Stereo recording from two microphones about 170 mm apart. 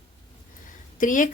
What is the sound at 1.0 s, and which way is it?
Speech, 50° left (ahead or behind).